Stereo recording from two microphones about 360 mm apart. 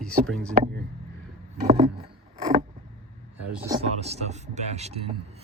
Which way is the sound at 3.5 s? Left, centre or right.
Centre.